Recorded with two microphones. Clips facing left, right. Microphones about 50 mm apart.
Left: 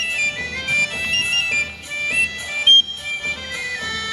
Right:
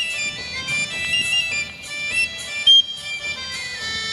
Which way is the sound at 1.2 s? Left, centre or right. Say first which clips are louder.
Left 2 dB; left.